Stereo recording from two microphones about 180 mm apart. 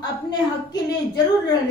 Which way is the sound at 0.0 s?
25° left (ahead or behind).